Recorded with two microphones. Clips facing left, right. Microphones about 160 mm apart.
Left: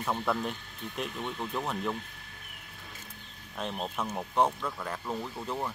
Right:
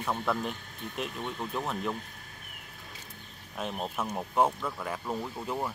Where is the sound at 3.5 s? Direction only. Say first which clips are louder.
Right 1 dB; 5° right (ahead or behind).